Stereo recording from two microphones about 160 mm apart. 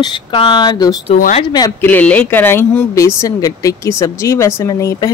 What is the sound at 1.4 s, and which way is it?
Speech, 25° left (ahead or behind).